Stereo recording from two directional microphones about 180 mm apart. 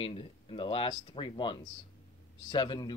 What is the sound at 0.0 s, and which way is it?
Speech, 30° left (ahead or behind).